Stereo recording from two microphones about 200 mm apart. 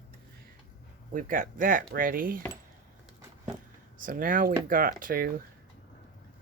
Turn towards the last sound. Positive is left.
turn(degrees=-45)  # may be behind; listen again after turning